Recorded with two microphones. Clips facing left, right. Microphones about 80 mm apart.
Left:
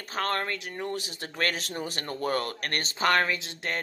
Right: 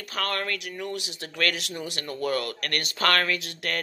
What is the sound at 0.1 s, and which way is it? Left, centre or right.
Speech, left.